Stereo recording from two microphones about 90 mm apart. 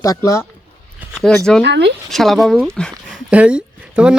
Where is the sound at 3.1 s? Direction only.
15° right (ahead or behind).